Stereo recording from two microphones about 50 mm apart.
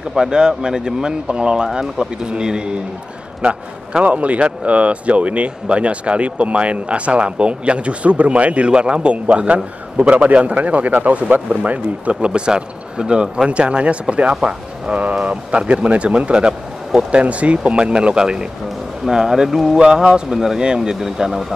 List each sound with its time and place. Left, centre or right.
0.1 s a man's voice: centre